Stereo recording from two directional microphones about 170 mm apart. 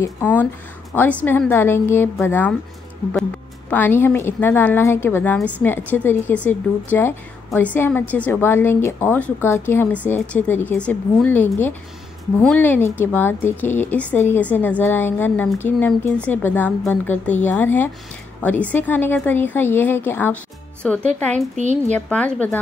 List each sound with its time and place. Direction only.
0.0 s speech: 10° left (ahead or behind)
3.7 s speech: 10° left (ahead or behind)
21.5 s a woman's voice: 45° right (ahead or behind)
21.9 s speech: 10° left (ahead or behind)